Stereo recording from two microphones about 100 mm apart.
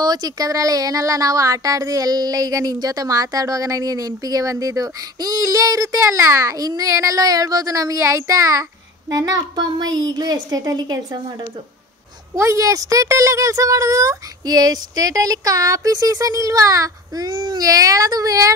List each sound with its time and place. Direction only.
0.0 s speech: 40° right (ahead or behind)
12.4 s speech: 30° right (ahead or behind)